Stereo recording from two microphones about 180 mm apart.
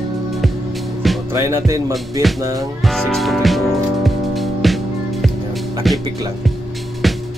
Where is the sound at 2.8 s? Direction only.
Centre (ahead or behind).